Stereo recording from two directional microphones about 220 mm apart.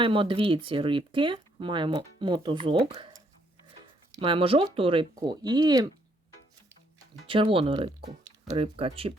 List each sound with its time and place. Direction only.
0.0 s speech: 25° right (ahead or behind)
4.1 s speech: 25° right (ahead or behind)
7.3 s speech: 25° right (ahead or behind)